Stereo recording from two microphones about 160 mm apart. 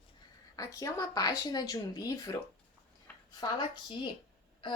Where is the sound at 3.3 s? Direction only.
25° left (ahead or behind).